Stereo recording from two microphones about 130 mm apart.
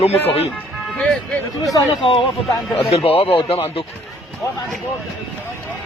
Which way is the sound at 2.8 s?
50° left (ahead or behind).